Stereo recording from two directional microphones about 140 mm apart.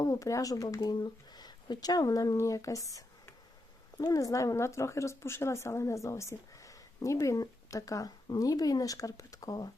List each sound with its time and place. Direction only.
0.0 s speech: 25° left (ahead or behind)